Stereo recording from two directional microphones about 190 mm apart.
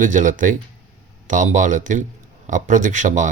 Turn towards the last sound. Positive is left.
turn(degrees=-40)  # may be behind; listen again after turning